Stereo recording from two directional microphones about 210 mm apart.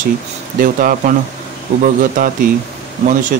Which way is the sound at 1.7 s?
25° right (ahead or behind).